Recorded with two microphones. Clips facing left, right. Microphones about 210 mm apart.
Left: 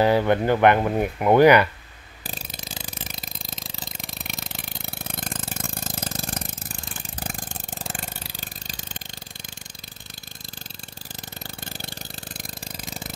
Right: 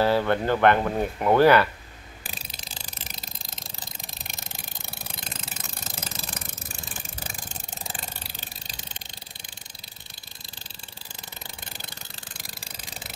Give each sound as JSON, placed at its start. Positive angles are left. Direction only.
{"t": 0.0, "sound": "speech", "side_deg": 15}
{"t": 2.2, "sound": "mechanisms", "side_deg": 50}
{"t": 4.1, "sound": "a sound", "side_deg": 65}